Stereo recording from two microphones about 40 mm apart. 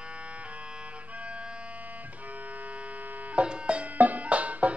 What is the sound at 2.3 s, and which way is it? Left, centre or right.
Music, right.